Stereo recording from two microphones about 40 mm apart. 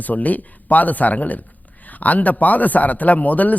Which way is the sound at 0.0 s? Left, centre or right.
Left.